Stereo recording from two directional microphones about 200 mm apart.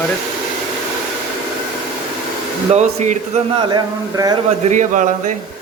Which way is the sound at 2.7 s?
35° right (ahead or behind).